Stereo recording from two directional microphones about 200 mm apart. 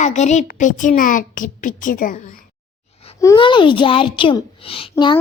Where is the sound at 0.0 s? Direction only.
35° left (ahead or behind).